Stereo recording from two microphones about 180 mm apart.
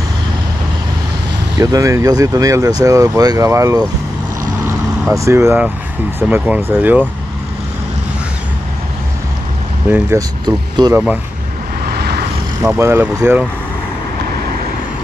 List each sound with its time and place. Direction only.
1.6 s speech: 20° right (ahead or behind)
9.8 s speech: 10° right (ahead or behind)
11.8 s vehicle: 60° right (ahead or behind)
12.6 s speech: 15° right (ahead or behind)